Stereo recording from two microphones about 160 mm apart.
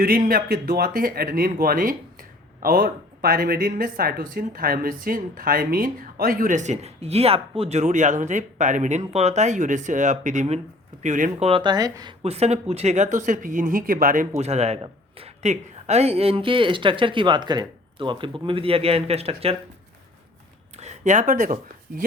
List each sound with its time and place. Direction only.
0.0 s speech: 65° right (ahead or behind); by 12.1 s 25° right (ahead or behind)
12.2 s speech: 40° right (ahead or behind)
20.8 s speech: 45° right (ahead or behind)